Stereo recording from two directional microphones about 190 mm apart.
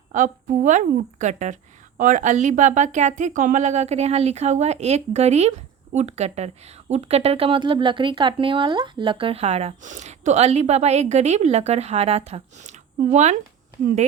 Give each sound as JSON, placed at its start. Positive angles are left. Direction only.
{"t": 0.1, "sound": "speech", "side_deg": -40}